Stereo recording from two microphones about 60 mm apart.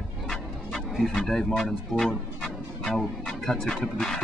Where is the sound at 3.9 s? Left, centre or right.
Centre.